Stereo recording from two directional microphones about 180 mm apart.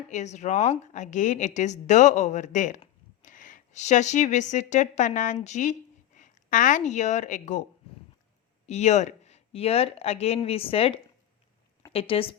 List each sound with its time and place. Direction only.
0.1 s a woman's voice: 40° left (ahead or behind)
8.6 s a woman's voice: 40° left (ahead or behind)